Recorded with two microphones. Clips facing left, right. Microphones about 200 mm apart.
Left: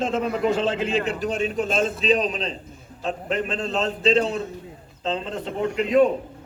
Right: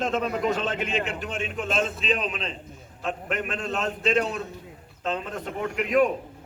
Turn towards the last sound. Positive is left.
turn(degrees=25)  # may be behind; listen again after turning